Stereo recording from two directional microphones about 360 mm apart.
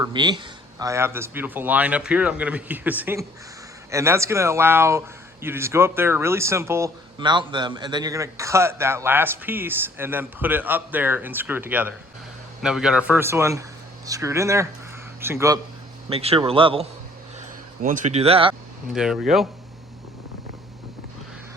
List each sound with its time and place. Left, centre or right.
0.0 s speech: centre
17.8 s speech: right
18.9 s speech: centre